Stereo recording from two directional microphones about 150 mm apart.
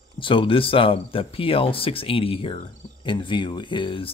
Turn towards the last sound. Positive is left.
turn(degrees=35)  # may be behind; listen again after turning